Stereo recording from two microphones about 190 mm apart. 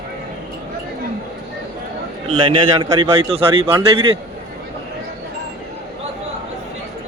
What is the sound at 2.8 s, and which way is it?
Speech, 25° right (ahead or behind).